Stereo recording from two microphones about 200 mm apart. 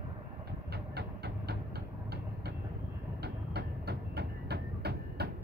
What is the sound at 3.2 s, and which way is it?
Train, 55° right (ahead or behind).